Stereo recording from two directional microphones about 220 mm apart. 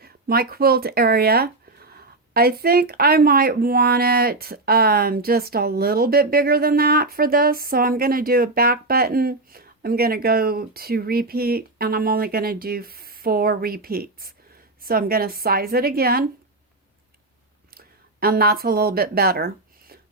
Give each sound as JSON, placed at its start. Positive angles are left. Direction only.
{"t": 0.0, "sound": "speech", "side_deg": -45}
{"t": 17.7, "sound": "speech", "side_deg": -45}